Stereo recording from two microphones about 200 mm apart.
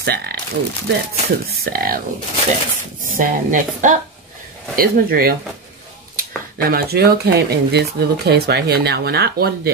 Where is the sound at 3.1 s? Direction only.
40° right (ahead or behind).